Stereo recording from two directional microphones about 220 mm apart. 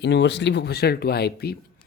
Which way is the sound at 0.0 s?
50° left (ahead or behind).